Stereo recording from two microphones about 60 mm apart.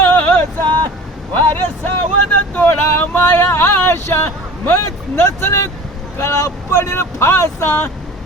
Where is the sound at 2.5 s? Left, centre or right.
Left.